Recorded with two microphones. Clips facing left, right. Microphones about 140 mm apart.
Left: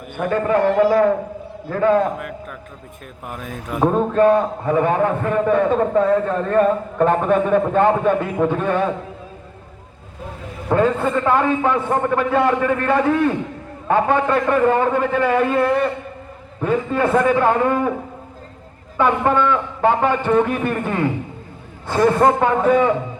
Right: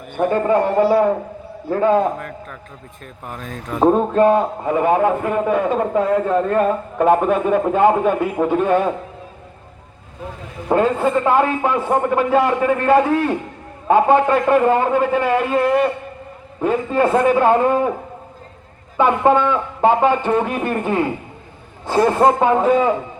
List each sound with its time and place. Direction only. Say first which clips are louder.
0.3 s a man's voice: even; 15° right (ahead or behind)
2.1 s a sound: left 1 dB; 5° left (ahead or behind)
3.2 s speech: even; 10° left (ahead or behind)
3.8 s a man's voice: right 1 dB; 15° right (ahead or behind)
10.7 s a man's voice: right 1 dB; 15° right (ahead or behind)
18.9 s a man's voice: right 2 dB; 15° right (ahead or behind)